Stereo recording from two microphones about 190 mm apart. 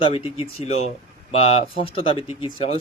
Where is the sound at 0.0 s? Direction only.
30° left (ahead or behind).